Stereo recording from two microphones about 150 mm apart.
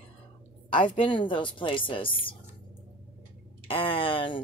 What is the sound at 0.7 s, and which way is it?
Speech, 35° left (ahead or behind).